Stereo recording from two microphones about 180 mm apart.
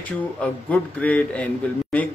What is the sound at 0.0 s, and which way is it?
Speech, 10° left (ahead or behind).